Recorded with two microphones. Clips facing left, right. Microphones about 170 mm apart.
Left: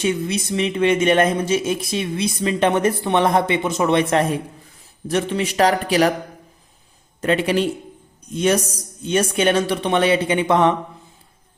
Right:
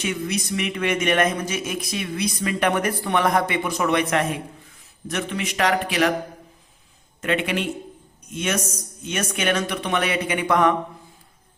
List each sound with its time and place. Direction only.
0.0 s a man's voice: 30° left (ahead or behind)
7.2 s a man's voice: 35° left (ahead or behind)